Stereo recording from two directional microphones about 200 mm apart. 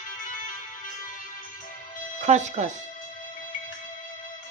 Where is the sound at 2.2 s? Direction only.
35° right (ahead or behind).